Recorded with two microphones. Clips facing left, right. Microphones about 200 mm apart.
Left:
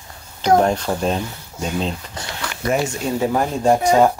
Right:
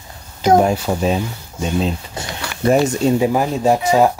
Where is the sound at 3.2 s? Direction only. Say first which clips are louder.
Right 3 dB; 5° right (ahead or behind).